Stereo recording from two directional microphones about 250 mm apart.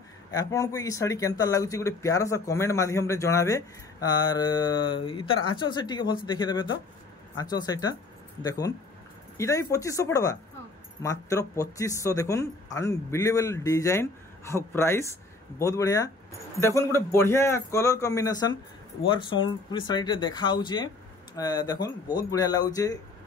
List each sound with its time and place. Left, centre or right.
0.3 s speech: centre